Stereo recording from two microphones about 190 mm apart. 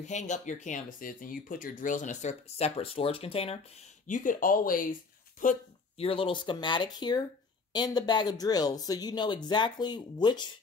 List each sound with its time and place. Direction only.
0.0 s speech: 40° left (ahead or behind)
4.1 s speech: 45° left (ahead or behind)
6.0 s speech: 30° left (ahead or behind)